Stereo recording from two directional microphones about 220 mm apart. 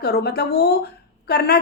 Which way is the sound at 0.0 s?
45° left (ahead or behind).